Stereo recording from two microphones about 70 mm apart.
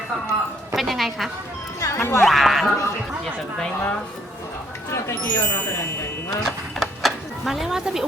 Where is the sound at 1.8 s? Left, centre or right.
Left.